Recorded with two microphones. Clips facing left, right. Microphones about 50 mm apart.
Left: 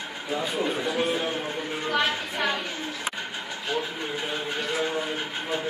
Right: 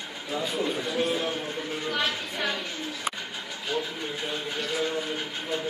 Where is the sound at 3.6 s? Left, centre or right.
Centre.